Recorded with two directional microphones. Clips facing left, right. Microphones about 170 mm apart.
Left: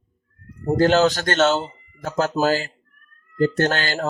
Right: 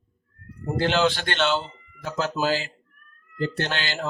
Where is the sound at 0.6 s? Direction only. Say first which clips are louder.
Left 6 dB; 40° left (ahead or behind).